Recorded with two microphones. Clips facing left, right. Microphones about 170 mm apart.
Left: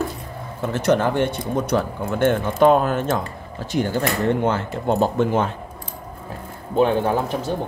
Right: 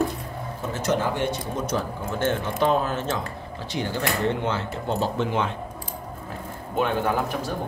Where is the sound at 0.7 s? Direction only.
65° left (ahead or behind); by 5.5 s 45° left (ahead or behind).